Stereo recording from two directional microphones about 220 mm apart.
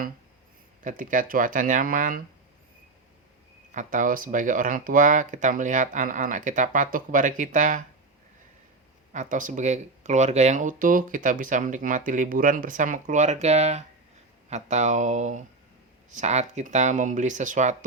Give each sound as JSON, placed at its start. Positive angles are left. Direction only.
{"t": 0.9, "sound": "speech", "side_deg": -35}
{"t": 3.7, "sound": "speech", "side_deg": -35}
{"t": 9.1, "sound": "speech", "side_deg": -35}